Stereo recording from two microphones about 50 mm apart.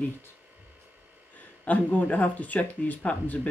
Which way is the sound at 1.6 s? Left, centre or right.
Left.